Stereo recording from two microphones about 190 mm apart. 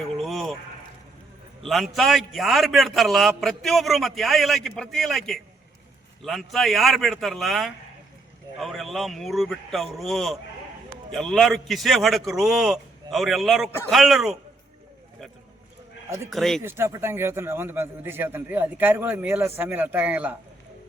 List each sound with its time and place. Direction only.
0.2 s a sound: centre (ahead or behind)
1.6 s a man's voice: centre (ahead or behind)
16.3 s a man's voice: centre (ahead or behind)
16.6 s a man's voice: 15° right (ahead or behind)